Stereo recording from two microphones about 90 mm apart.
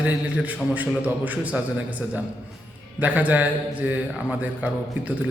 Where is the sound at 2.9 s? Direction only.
15° right (ahead or behind).